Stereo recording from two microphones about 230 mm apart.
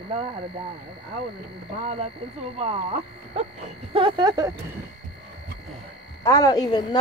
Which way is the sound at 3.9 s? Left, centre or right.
Right.